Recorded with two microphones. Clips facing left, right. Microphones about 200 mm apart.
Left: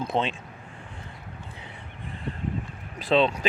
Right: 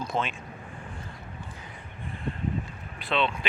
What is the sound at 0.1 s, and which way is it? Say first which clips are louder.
Speech: left 4 dB; 25° left (ahead or behind).